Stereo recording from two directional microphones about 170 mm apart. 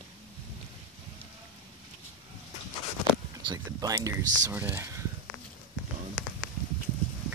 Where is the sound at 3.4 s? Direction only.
20° right (ahead or behind).